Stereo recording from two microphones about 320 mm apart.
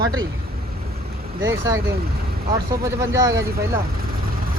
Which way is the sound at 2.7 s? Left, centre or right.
Centre.